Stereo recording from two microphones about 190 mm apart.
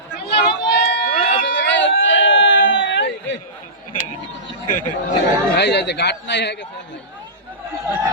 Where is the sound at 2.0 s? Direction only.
75° left (ahead or behind).